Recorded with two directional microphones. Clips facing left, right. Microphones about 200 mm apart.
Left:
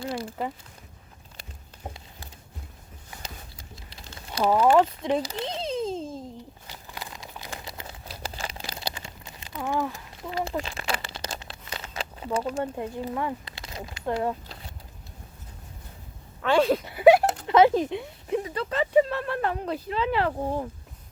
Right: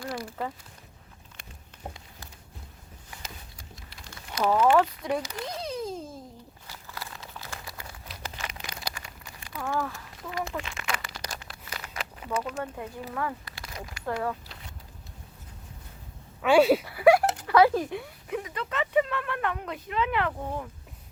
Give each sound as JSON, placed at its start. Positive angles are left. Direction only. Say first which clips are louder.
{"t": 0.0, "sound": "speech", "louder": "left 3 dB", "side_deg": 25}
{"t": 3.9, "sound": "typing", "louder": "left 2 dB", "side_deg": 25}
{"t": 4.4, "sound": "speech", "louder": "left 2 dB", "side_deg": 15}
{"t": 5.0, "sound": "bleat", "louder": "left 4 dB", "side_deg": 25}
{"t": 6.7, "sound": "crumpling", "louder": "right 1 dB", "side_deg": 20}
{"t": 13.1, "sound": "speech", "louder": "left 3 dB", "side_deg": 20}
{"t": 14.4, "sound": "vehicle", "louder": "left 3 dB", "side_deg": 35}
{"t": 16.4, "sound": "speech", "louder": "right 2 dB", "side_deg": -10}
{"t": 16.8, "sound": "speech", "louder": "left 3 dB", "side_deg": 25}